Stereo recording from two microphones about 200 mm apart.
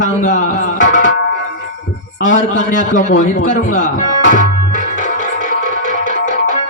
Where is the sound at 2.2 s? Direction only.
40° left (ahead or behind).